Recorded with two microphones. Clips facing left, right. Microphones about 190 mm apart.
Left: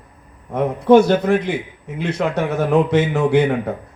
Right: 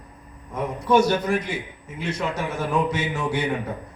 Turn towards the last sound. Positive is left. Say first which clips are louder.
# left 9 dB
turn(degrees=60)  # may be behind; listen again after turning